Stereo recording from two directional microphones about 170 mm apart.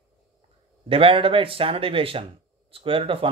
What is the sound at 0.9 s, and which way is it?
Speech, 30° right (ahead or behind).